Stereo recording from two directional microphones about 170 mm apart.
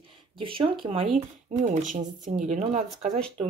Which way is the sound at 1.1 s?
40° right (ahead or behind).